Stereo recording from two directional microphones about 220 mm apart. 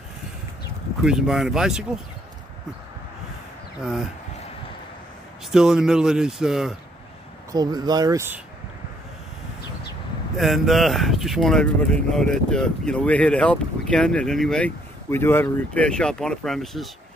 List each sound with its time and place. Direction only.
1.0 s speech: centre (ahead or behind)
3.8 s speech: centre (ahead or behind)
5.5 s speech: centre (ahead or behind)
7.5 s speech: 20° right (ahead or behind)
10.3 s speech: centre (ahead or behind)